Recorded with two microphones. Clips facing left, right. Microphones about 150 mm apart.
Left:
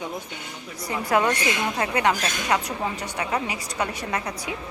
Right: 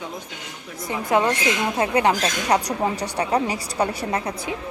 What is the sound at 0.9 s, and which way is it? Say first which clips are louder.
A woman's voice: right 2 dB; 20° right (ahead or behind).